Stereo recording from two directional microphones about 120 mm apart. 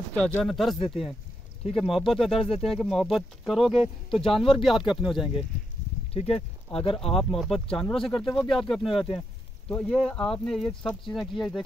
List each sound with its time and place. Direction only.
0.1 s speech: 5° left (ahead or behind)
6.1 s speech: 55° left (ahead or behind)
8.2 s speech: centre (ahead or behind)